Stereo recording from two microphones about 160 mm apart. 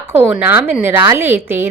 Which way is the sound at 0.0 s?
10° right (ahead or behind).